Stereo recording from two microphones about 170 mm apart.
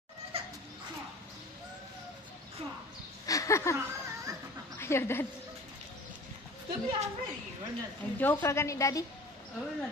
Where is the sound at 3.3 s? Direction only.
20° left (ahead or behind).